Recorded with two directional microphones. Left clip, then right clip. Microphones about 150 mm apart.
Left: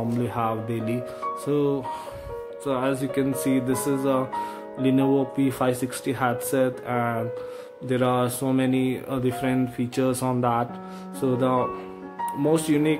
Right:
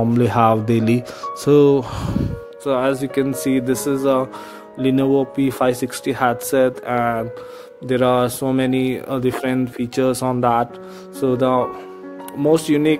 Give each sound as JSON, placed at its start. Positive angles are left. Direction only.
{"t": 0.2, "sound": "speech", "side_deg": -50}